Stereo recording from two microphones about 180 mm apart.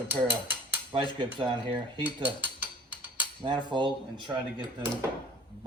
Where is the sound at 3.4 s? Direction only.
25° right (ahead or behind).